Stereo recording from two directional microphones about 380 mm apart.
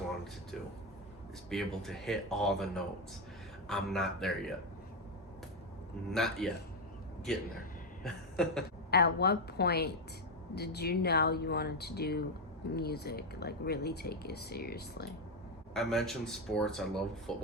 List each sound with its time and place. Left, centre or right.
1.5 s speech: centre
6.1 s speech: centre
8.0 s a sound: centre
8.9 s speech: left
15.7 s speech: centre